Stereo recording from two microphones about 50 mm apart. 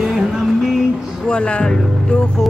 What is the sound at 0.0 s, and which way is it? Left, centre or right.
Music, centre.